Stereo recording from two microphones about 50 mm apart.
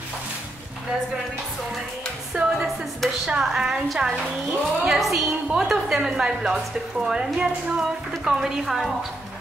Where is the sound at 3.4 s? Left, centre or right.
Centre.